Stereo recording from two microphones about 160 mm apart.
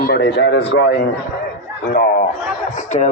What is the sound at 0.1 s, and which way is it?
Speech, 90° left.